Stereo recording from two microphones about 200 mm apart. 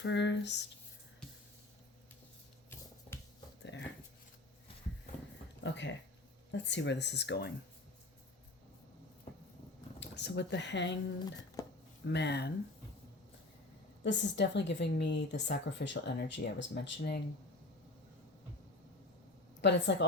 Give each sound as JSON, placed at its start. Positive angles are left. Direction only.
{"t": 0.0, "sound": "a woman's voice", "side_deg": 60}
{"t": 3.6, "sound": "dog", "side_deg": 65}
{"t": 5.6, "sound": "a woman's voice", "side_deg": 65}
{"t": 10.0, "sound": "speech", "side_deg": 60}
{"t": 12.0, "sound": "a woman's voice", "side_deg": 60}
{"t": 14.0, "sound": "a woman's voice", "side_deg": 60}
{"t": 19.6, "sound": "a woman's voice", "side_deg": 60}